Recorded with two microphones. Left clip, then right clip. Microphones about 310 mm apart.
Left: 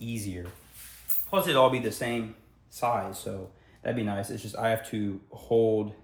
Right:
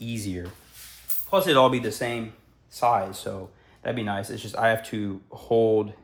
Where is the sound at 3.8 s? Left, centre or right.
Centre.